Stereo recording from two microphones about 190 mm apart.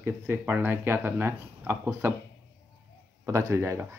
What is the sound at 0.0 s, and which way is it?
Speech, 10° right (ahead or behind).